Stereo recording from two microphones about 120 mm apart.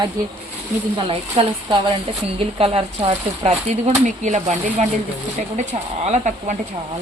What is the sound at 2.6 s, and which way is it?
Speech, 50° right (ahead or behind).